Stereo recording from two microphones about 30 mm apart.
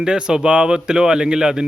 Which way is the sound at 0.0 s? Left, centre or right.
Right.